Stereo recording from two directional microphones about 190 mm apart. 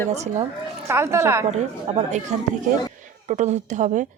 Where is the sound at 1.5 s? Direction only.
35° right (ahead or behind).